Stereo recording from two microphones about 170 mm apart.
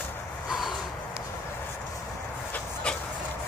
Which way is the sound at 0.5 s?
Centre (ahead or behind).